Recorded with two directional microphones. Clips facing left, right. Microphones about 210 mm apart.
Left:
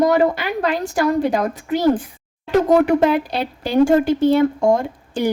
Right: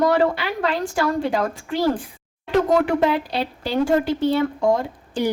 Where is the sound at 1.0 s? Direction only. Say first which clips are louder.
Left 4 dB; 15° left (ahead or behind).